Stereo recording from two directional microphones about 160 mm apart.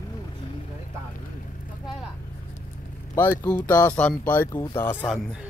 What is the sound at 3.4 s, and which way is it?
Speech, 10° left (ahead or behind).